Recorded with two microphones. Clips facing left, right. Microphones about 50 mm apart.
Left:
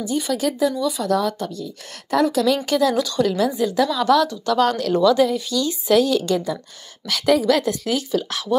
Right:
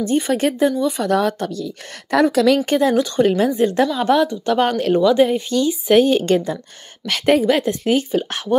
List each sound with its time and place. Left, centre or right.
0.0 s speech: right
2.6 s a woman's voice: right
7.4 s a woman's voice: right